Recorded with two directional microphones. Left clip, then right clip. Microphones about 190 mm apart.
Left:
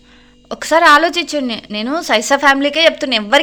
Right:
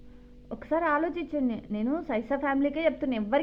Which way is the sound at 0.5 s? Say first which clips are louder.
Left 18 dB; 35° left (ahead or behind).